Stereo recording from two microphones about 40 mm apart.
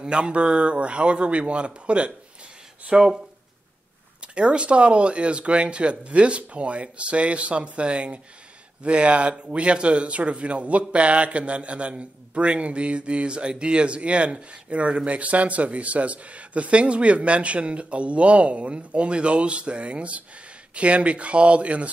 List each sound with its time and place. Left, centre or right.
0.0 s speech: right
4.2 s a man's voice: right